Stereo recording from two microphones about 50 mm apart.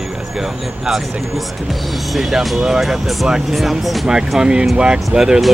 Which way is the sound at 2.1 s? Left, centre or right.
Centre.